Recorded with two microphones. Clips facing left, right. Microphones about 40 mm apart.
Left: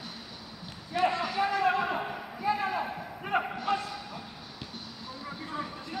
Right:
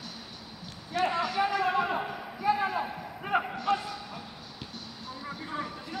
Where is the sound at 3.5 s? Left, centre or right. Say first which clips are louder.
Right 1 dB; centre.